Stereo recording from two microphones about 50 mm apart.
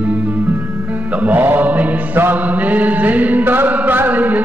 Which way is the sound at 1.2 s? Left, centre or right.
Right.